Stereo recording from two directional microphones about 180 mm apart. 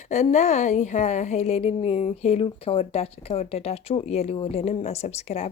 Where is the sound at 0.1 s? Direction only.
40° left (ahead or behind).